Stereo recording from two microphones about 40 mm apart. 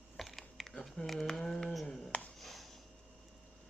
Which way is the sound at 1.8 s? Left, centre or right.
Left.